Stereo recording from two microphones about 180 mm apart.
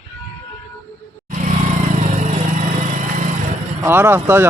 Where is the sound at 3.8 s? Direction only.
15° right (ahead or behind).